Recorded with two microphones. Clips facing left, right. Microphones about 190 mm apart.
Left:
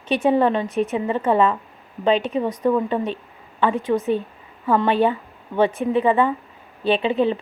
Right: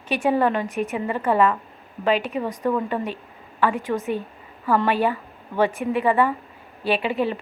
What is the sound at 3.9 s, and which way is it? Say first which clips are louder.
A woman's voice: left 4 dB; 10° left (ahead or behind).